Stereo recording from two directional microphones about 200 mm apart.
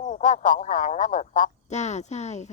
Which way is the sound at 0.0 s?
40° left (ahead or behind).